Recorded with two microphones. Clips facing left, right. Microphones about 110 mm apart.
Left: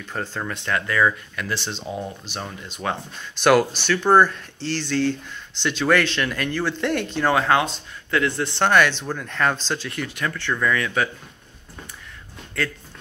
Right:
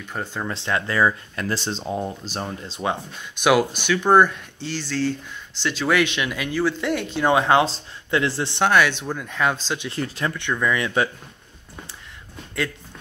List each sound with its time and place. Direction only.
0.1 s speech: 5° right (ahead or behind)
0.5 s speech: 25° right (ahead or behind)
3.8 s speech: 10° right (ahead or behind)
7.2 s speech: 20° right (ahead or behind)
8.5 s speech: 5° right (ahead or behind)
9.8 s speech: 30° right (ahead or behind)
10.5 s speech: 10° right (ahead or behind)